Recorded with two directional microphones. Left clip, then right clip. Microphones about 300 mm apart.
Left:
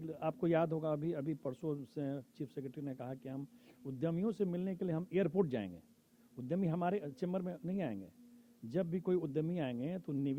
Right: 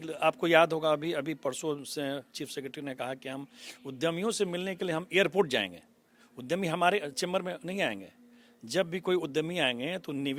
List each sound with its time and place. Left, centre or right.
0.0 s speech: centre